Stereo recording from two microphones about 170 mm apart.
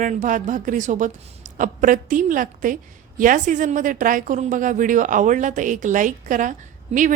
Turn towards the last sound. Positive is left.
turn(degrees=-50)  # may be behind; listen again after turning